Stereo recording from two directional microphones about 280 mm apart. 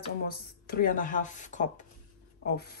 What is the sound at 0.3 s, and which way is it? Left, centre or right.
Speech, left.